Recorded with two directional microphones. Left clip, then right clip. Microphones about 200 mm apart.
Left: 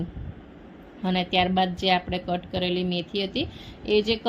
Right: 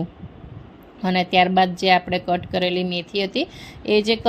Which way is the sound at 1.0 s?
25° right (ahead or behind).